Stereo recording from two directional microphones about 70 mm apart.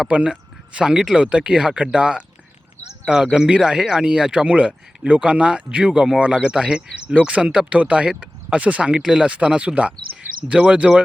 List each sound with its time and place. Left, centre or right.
0.1 s speech: centre
3.3 s speech: centre